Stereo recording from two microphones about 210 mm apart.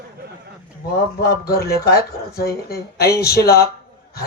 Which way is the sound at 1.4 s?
45° left (ahead or behind).